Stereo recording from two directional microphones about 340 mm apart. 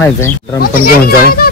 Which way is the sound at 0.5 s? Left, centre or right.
Left.